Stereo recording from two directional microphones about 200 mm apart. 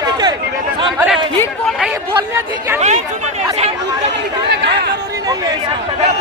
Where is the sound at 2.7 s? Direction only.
35° right (ahead or behind).